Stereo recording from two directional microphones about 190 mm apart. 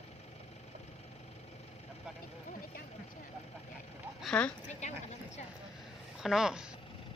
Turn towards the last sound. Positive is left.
turn(degrees=-5)  # may be behind; listen again after turning